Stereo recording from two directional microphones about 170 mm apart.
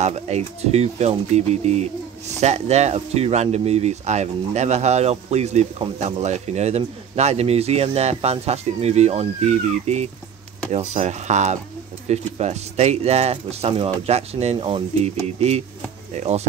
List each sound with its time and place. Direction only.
0.0 s speech: 40° right (ahead or behind)